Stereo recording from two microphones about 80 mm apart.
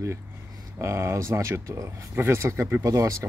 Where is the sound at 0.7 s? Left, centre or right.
Right.